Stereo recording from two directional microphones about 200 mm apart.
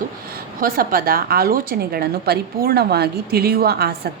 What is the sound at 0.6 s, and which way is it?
A woman's voice, 45° right (ahead or behind).